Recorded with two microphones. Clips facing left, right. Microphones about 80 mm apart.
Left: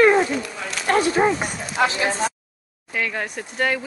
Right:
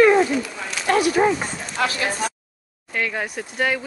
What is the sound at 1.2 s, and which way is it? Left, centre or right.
Speech, centre.